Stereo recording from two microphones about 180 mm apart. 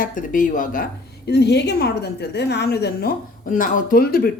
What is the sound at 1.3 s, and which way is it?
A woman's voice, 70° left (ahead or behind).